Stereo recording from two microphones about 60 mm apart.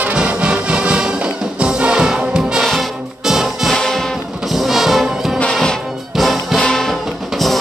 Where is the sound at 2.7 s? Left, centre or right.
Centre.